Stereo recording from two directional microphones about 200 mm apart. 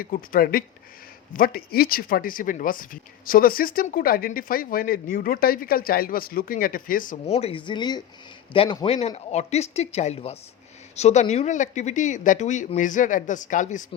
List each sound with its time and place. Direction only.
0.0 s speech: 45° left (ahead or behind)